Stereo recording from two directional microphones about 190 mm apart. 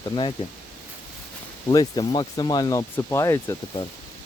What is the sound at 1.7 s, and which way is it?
Speech, 20° left (ahead or behind).